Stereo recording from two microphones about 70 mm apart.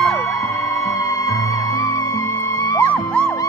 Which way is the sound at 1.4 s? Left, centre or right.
Left.